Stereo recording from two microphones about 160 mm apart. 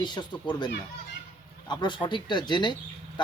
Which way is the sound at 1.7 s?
30° left (ahead or behind).